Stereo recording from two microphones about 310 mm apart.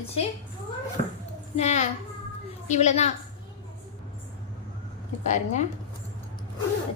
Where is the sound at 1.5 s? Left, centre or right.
Left.